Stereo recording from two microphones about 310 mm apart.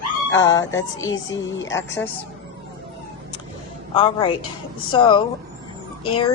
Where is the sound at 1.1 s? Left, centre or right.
Left.